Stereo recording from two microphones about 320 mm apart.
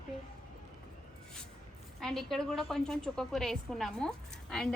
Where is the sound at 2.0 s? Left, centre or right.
Centre.